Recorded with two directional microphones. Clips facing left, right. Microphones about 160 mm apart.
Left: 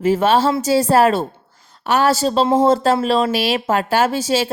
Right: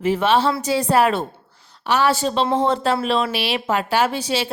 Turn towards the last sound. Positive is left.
turn(degrees=40)  # may be behind; listen again after turning